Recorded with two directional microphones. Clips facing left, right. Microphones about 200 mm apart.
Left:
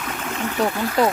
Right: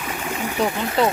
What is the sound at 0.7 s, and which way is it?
Speech, 20° right (ahead or behind).